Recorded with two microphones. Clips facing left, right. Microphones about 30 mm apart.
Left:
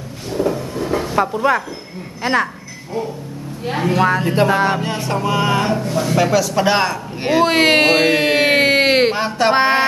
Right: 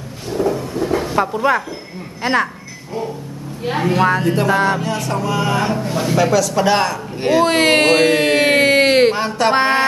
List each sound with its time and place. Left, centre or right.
0.3 s vehicle: centre
2.2 s a sound: centre
3.6 s a woman's voice: centre
4.8 s music: left
5.8 s a man's voice: centre
6.1 s a man's voice: centre